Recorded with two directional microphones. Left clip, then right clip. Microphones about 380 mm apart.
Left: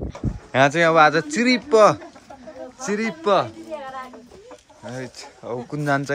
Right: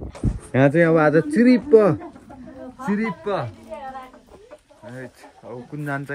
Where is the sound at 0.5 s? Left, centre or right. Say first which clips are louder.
Left 2 dB; centre.